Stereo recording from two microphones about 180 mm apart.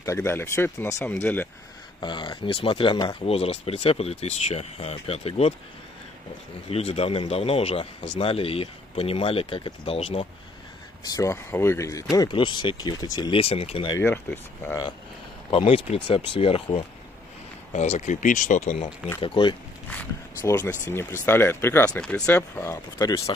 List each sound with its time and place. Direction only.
0.0 s speech: 15° left (ahead or behind)
2.0 s speech: 25° left (ahead or behind)
6.7 s speech: 35° left (ahead or behind)
11.1 s speech: 15° left (ahead or behind); by 13.9 s 30° left (ahead or behind)
13.9 s speech: 10° left (ahead or behind)
15.5 s speech: 30° left (ahead or behind)
19.2 s speech: 30° left (ahead or behind)
19.9 s speech: 15° left (ahead or behind)